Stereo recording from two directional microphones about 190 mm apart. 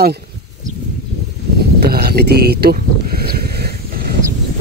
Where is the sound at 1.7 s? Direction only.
55° right (ahead or behind).